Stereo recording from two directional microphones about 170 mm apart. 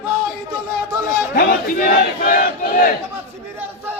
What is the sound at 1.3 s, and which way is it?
Battle cry, 60° left (ahead or behind).